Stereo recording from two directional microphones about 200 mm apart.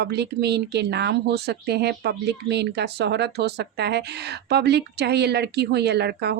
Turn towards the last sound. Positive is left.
turn(degrees=-55)  # may be behind; listen again after turning